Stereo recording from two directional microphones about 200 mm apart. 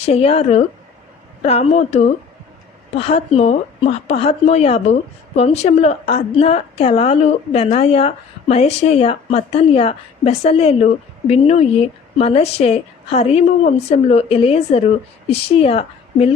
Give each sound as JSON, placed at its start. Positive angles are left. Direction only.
{"t": 0.0, "sound": "a woman's voice", "side_deg": 30}